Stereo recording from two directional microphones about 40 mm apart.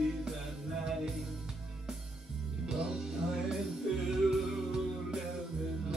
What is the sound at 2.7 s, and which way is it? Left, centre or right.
Music, centre.